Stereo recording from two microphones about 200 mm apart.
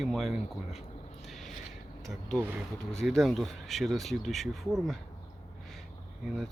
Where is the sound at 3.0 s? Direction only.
Centre (ahead or behind).